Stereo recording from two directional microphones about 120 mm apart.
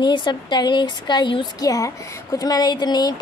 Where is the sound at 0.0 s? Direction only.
40° left (ahead or behind).